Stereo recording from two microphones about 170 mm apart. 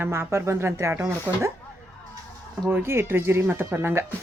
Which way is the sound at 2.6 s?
15° right (ahead or behind).